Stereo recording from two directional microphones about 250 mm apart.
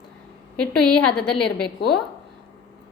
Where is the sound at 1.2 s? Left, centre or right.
Centre.